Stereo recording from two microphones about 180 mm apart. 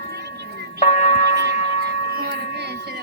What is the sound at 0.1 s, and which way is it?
Music, 65° right (ahead or behind).